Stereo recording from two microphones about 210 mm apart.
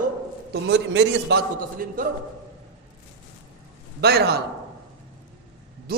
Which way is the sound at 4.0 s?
50° right (ahead or behind).